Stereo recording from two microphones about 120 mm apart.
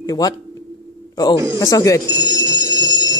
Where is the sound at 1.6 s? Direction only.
25° left (ahead or behind).